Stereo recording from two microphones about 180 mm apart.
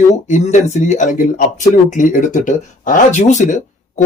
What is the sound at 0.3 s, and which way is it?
Speech, 40° left (ahead or behind).